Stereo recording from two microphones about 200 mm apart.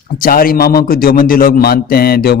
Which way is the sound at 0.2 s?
45° left (ahead or behind).